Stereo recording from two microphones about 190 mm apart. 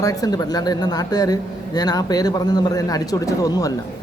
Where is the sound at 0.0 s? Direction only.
20° left (ahead or behind).